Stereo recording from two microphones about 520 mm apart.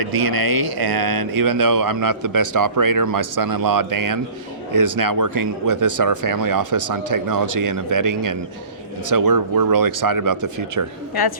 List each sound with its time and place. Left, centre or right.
0.0 s speech: right
11.1 s a woman's voice: left